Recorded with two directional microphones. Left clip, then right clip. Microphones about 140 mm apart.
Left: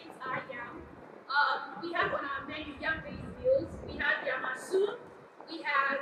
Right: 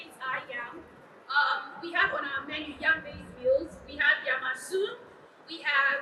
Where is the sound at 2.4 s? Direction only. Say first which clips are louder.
Right 4 dB; 35° right (ahead or behind).